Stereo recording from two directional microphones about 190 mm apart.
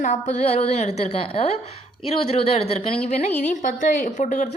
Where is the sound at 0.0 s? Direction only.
40° left (ahead or behind).